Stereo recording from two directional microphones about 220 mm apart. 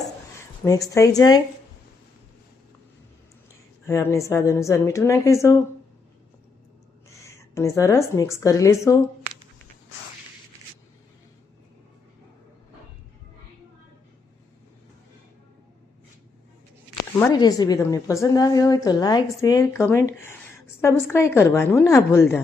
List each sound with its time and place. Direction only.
0.6 s a woman's voice: 15° left (ahead or behind)
3.8 s a woman's voice: 10° left (ahead or behind)
7.3 s a woman's voice: 15° left (ahead or behind)
16.9 s a woman's voice: 15° left (ahead or behind)